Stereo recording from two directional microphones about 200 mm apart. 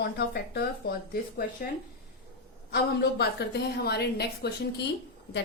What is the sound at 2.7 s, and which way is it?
A woman's voice, 55° left (ahead or behind).